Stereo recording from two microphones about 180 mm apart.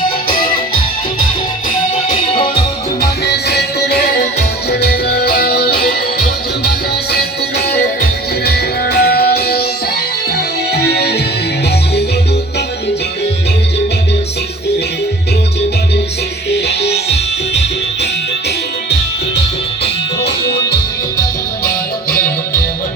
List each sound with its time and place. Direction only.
2.1 s music: 25° left (ahead or behind)
3.0 s music: 65° left (ahead or behind)
10.7 s music: 65° left (ahead or behind)
16.5 s music: 65° left (ahead or behind)
20.2 s music: 65° left (ahead or behind)